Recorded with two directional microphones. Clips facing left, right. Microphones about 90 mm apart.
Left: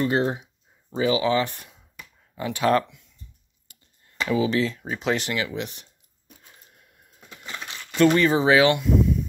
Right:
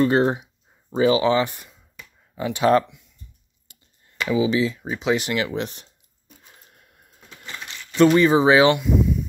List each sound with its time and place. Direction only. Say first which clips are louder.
0.0 s speech: right 5 dB; 35° right (ahead or behind)
2.3 s speech: right 3 dB; 20° right (ahead or behind)
3.7 s a sound: right 1 dB; 20° right (ahead or behind)
4.3 s speech: right 2 dB; 5° right (ahead or behind)
5.3 s speech: right 3 dB; 35° right (ahead or behind)
8.0 s speech: right 3 dB; 20° right (ahead or behind)
8.7 s speech: even; centre (ahead or behind)